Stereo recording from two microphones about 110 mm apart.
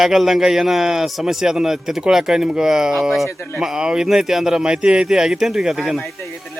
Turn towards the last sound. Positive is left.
turn(degrees=0)  # may be behind; listen again after turning